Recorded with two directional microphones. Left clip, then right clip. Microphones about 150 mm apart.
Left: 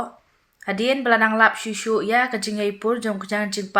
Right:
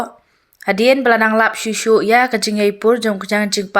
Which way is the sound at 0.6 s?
45° right (ahead or behind).